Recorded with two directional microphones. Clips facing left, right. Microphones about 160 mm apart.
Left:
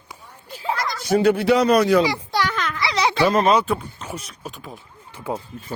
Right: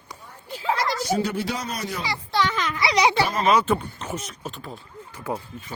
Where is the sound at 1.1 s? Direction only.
60° left (ahead or behind).